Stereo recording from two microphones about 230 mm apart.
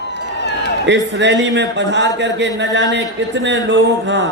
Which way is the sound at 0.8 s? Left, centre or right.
Right.